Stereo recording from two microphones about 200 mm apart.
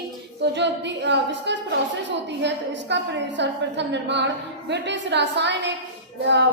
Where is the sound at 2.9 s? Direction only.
65° right (ahead or behind).